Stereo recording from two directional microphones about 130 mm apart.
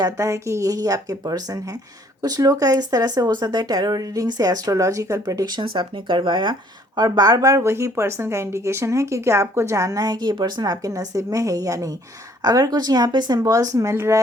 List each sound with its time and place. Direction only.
0.0 s speech: 25° right (ahead or behind)